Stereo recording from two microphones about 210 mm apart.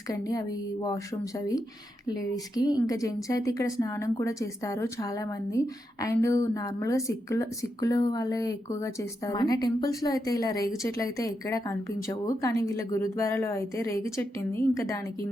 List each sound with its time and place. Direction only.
0.1 s a woman's voice: 15° left (ahead or behind)